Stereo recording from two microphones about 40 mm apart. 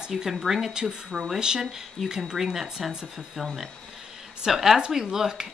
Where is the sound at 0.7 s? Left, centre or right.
Centre.